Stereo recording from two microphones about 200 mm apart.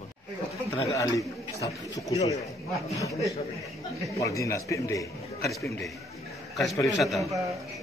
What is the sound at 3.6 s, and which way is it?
Speech, centre (ahead or behind).